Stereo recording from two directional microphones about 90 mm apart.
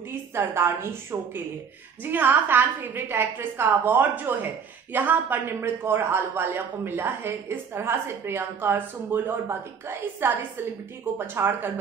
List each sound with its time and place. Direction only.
0.1 s a man's voice: 30° right (ahead or behind)